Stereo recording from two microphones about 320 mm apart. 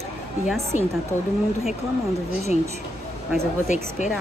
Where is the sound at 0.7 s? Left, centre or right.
Left.